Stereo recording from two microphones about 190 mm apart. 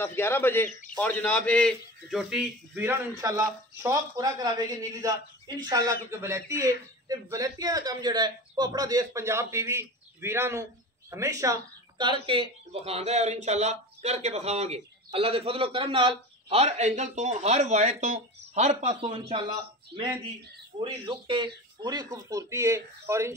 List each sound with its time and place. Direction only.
0.0 s a man's voice: 10° left (ahead or behind); by 19.4 s 35° right (ahead or behind)
20.8 s speech: 25° right (ahead or behind)